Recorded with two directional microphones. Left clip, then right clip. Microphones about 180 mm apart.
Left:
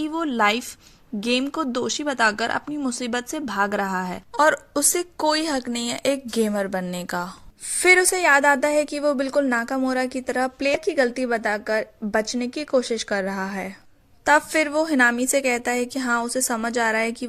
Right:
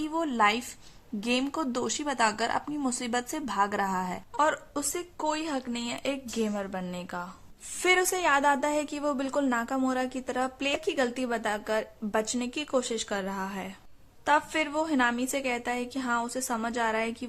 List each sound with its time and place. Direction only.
0.0 s a woman's voice: 20° left (ahead or behind)
4.4 s a woman's voice: 35° left (ahead or behind)
7.8 s a woman's voice: 25° left (ahead or behind)